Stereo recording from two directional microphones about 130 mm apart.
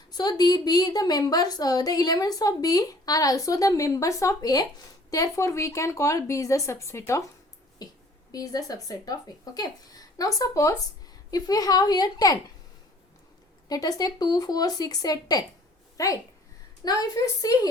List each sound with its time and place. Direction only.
0.1 s a woman's voice: 30° left (ahead or behind)
7.8 s a sound: 30° left (ahead or behind)
8.3 s a woman's voice: 30° left (ahead or behind)
13.7 s a woman's voice: 30° left (ahead or behind)